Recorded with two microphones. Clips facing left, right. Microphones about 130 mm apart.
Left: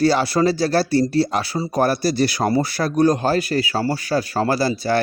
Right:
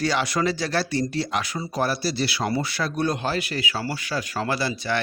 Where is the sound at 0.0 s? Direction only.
35° left (ahead or behind).